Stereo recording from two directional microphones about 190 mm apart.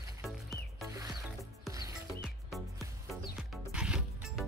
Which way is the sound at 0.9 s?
20° right (ahead or behind).